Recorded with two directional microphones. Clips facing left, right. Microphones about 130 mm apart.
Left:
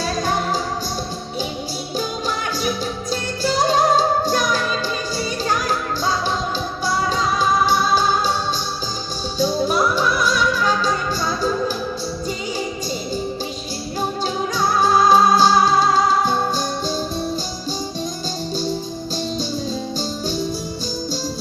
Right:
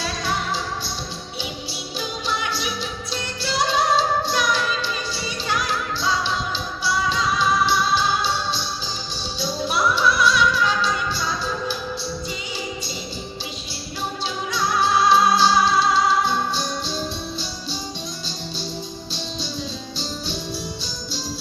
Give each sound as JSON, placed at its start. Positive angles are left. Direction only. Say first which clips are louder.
{"t": 0.0, "sound": "music", "louder": "left 5 dB", "side_deg": 45}
{"t": 2.0, "sound": "music", "louder": "left 2 dB", "side_deg": 45}
{"t": 14.5, "sound": "music", "louder": "left 3 dB", "side_deg": 40}
{"t": 20.0, "sound": "music", "louder": "left 6 dB", "side_deg": 45}